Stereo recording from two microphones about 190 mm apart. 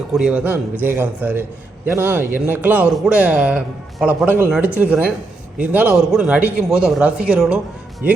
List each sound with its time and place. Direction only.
0.1 s a man's voice: 5° right (ahead or behind)